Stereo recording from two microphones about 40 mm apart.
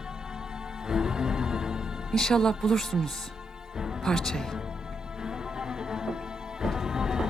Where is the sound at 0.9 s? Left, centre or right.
Centre.